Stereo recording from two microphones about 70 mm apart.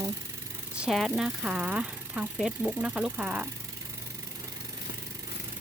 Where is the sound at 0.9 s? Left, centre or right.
Centre.